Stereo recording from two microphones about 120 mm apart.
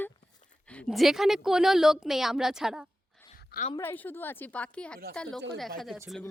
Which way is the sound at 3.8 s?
15° left (ahead or behind).